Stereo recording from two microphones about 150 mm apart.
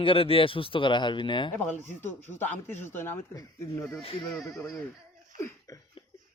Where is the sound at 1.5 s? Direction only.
10° left (ahead or behind).